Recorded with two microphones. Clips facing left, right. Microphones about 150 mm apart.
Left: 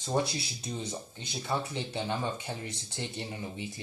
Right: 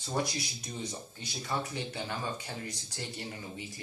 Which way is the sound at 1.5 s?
20° left (ahead or behind).